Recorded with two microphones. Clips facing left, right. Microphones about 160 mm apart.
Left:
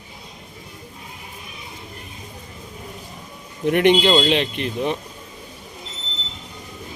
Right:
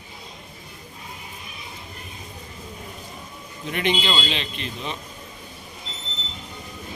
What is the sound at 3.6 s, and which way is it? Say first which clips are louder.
Speech: left 9 dB; 60° left (ahead or behind).